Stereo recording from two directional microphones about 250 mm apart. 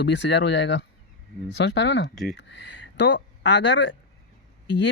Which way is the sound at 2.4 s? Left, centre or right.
Left.